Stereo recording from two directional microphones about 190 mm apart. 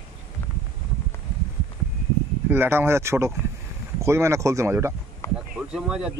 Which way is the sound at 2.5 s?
10° right (ahead or behind).